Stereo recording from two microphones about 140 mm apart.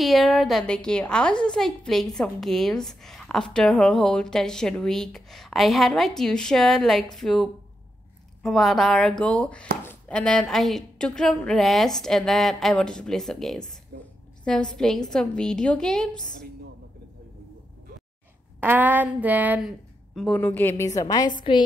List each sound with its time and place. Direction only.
0.0 s a woman's voice: centre (ahead or behind)
13.9 s a sound: 90° right
14.4 s a woman's voice: 5° left (ahead or behind)
18.6 s speech: 15° right (ahead or behind)
20.3 s a woman's voice: 15° left (ahead or behind)